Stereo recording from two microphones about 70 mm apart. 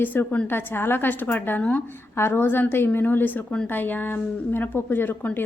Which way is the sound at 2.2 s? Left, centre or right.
Left.